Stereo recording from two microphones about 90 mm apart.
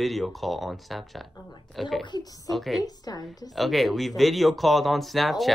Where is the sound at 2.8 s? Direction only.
45° left (ahead or behind).